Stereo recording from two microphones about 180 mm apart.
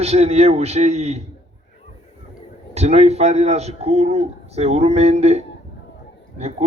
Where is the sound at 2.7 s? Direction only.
35° right (ahead or behind).